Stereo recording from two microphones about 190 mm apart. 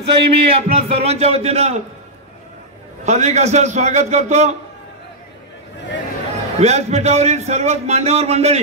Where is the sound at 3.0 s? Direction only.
35° right (ahead or behind).